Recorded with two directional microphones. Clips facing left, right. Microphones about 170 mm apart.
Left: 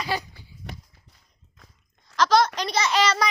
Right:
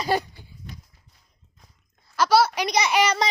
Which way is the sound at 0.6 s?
75° left (ahead or behind).